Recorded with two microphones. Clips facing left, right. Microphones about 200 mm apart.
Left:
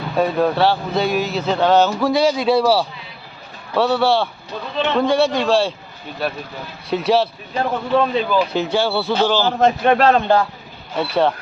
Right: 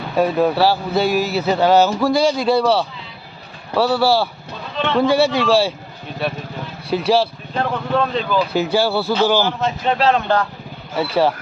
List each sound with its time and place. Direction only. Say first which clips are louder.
0.2 s speech: right 1 dB; 5° right (ahead or behind)
6.9 s speech: even; centre (ahead or behind)
8.5 s speech: right 1 dB; 5° right (ahead or behind)
9.5 s a man's voice: left 5 dB; 50° left (ahead or behind)
10.9 s speech: right 1 dB; 5° right (ahead or behind)